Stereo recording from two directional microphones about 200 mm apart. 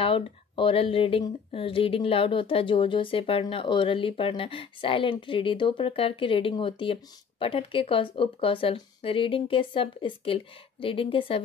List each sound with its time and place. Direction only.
0.0 s speech: 25° left (ahead or behind)